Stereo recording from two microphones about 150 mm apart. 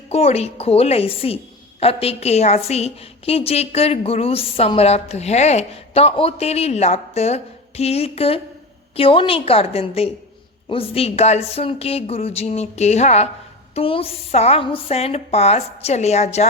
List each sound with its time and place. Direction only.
0.1 s a woman's voice: 45° left (ahead or behind)